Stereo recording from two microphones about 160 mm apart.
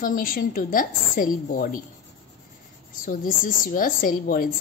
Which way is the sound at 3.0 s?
55° left (ahead or behind).